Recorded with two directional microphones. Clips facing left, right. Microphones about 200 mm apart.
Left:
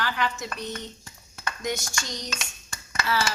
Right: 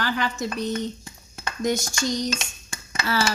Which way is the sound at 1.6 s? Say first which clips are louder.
Right 8 dB; 35° right (ahead or behind).